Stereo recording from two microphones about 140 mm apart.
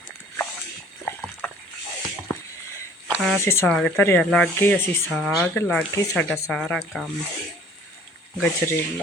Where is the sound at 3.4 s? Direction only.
15° left (ahead or behind).